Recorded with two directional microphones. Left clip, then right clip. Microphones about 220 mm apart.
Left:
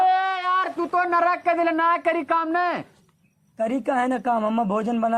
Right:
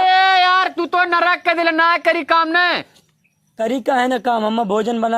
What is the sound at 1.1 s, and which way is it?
A man's voice, 25° right (ahead or behind).